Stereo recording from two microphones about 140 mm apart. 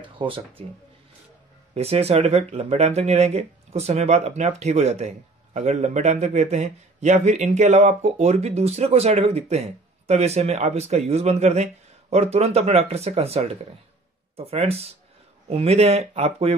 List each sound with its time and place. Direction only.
0.0 s speech: 40° right (ahead or behind)
1.7 s a man's voice: 50° right (ahead or behind)